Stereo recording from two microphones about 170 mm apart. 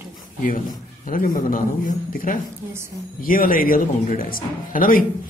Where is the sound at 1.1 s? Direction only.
55° left (ahead or behind).